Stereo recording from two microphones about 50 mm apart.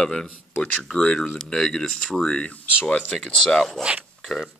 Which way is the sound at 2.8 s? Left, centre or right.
Left.